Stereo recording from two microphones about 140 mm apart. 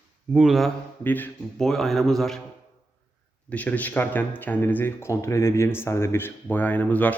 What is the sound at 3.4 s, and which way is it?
Speech, 10° left (ahead or behind).